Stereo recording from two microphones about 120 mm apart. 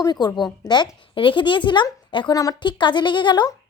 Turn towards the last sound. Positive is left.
turn(degrees=35)  # may be behind; listen again after turning